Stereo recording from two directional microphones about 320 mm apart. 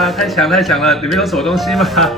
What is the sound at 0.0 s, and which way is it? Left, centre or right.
A man's voice, centre.